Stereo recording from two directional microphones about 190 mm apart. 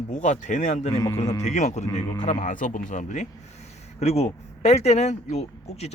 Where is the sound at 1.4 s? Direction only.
40° left (ahead or behind).